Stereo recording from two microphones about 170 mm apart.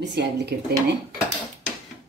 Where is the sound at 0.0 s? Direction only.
85° right.